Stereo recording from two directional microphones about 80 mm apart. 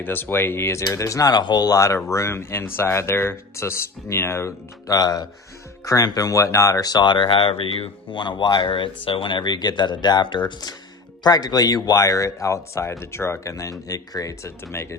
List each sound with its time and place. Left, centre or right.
0.0 s speech: left
1.3 s speech: left
8.1 s speech: left
13.5 s speech: left
14.7 s speech: left